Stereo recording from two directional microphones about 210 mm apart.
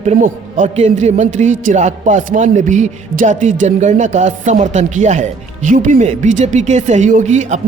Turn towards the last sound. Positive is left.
turn(degrees=-35)  # may be behind; listen again after turning